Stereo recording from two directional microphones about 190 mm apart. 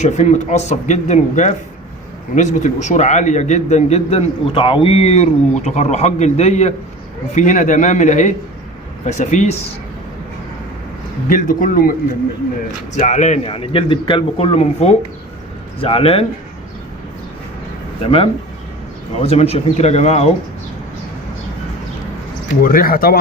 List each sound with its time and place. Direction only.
0.0 s a man's voice: 40° left (ahead or behind)
11.3 s a man's voice: 45° left (ahead or behind); by 16.2 s 30° left (ahead or behind)
18.0 s a man's voice: 30° left (ahead or behind)
22.6 s a man's voice: 50° left (ahead or behind)